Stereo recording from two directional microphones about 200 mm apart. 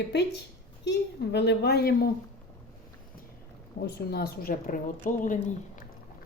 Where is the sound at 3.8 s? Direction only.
55° left (ahead or behind).